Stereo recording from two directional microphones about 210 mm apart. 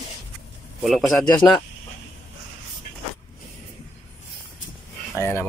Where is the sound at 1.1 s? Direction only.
20° left (ahead or behind).